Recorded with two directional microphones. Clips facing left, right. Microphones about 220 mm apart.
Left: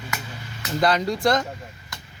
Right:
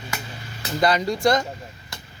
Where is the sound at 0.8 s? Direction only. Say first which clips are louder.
Right 1 dB; centre (ahead or behind).